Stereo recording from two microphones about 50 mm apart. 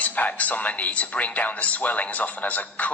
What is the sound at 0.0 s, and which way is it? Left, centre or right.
Speech, left.